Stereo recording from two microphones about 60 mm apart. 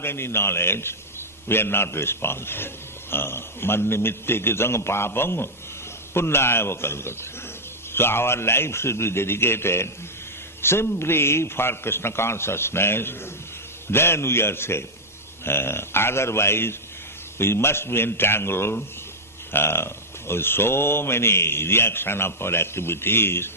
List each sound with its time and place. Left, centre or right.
0.0 s a man's voice: left